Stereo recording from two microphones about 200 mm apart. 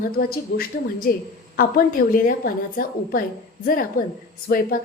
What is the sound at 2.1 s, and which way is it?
Speech, 45° left (ahead or behind).